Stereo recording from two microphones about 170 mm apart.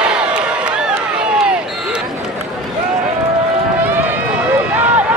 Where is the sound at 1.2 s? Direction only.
5° right (ahead or behind).